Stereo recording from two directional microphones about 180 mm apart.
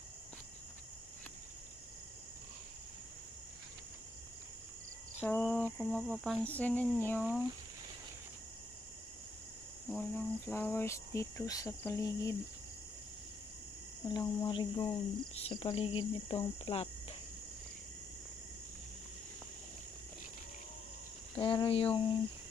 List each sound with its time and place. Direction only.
5.2 s speech: 5° left (ahead or behind)
9.8 s speech: 5° left (ahead or behind)
14.0 s speech: 25° left (ahead or behind)
21.4 s speech: 30° left (ahead or behind)